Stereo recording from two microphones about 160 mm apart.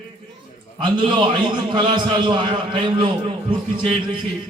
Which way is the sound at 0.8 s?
30° right (ahead or behind).